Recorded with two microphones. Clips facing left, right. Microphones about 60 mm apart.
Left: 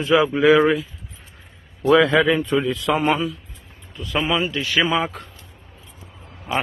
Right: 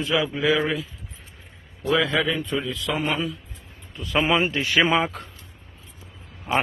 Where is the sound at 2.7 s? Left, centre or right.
Left.